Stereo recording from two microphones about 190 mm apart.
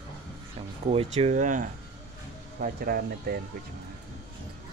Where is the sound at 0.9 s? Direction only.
30° right (ahead or behind); by 3.4 s 50° right (ahead or behind).